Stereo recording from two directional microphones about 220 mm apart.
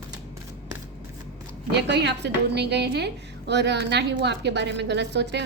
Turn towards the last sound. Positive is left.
turn(degrees=-50)  # may be behind; listen again after turning